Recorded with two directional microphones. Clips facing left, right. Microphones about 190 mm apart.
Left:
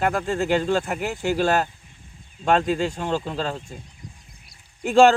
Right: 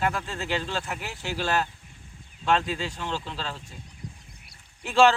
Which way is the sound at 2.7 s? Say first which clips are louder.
Left 8 dB; 50° left (ahead or behind).